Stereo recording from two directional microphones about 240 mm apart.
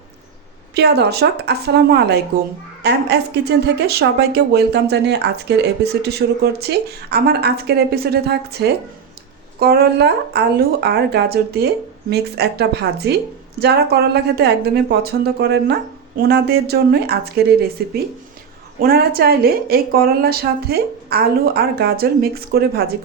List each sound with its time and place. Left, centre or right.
0.7 s a woman's voice: right
18.8 s a woman's voice: right